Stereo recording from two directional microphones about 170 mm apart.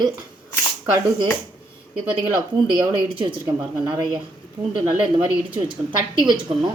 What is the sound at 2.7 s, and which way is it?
A woman's voice, 25° right (ahead or behind).